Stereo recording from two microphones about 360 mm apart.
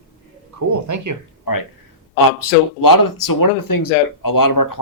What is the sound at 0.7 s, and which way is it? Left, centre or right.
Speech, right.